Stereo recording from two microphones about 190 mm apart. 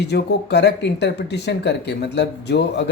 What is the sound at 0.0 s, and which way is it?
Speech, 60° left (ahead or behind).